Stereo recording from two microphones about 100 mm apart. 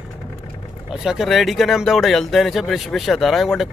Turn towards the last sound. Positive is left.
turn(degrees=0)  # may be behind; listen again after turning